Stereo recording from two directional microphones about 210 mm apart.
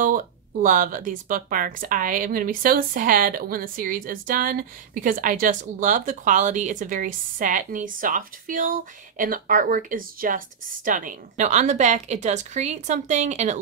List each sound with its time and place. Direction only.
0.0 s speech: 40° right (ahead or behind)